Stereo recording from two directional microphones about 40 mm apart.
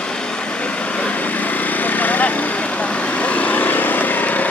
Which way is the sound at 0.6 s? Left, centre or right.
Left.